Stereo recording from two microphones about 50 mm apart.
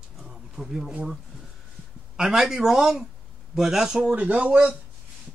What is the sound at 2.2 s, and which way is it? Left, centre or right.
Speech, centre.